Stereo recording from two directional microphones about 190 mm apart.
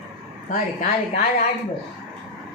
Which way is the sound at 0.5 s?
45° left (ahead or behind).